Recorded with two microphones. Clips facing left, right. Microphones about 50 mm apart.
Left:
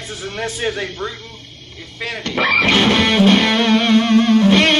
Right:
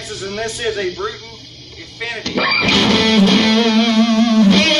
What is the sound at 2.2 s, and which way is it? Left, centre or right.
Music, centre.